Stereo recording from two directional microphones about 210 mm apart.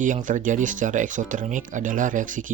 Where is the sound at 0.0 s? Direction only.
40° right (ahead or behind).